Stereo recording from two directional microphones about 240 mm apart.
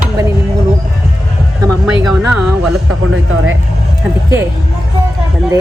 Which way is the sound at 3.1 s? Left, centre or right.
Right.